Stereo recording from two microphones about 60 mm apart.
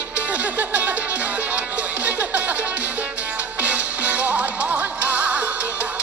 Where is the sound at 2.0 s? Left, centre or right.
Right.